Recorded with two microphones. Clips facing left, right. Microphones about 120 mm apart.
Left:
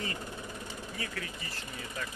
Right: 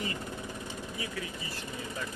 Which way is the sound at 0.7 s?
20° right (ahead or behind).